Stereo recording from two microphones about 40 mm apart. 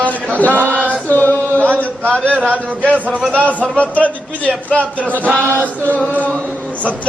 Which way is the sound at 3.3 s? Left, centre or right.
Left.